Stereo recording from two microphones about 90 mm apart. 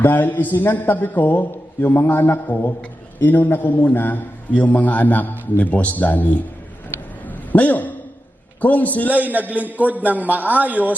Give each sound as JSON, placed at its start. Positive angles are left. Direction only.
{"t": 0.0, "sound": "a man's voice", "side_deg": 20}
{"t": 7.3, "sound": "a sound", "side_deg": 20}
{"t": 8.6, "sound": "a man's voice", "side_deg": 15}
{"t": 9.0, "sound": "a man's voice", "side_deg": -20}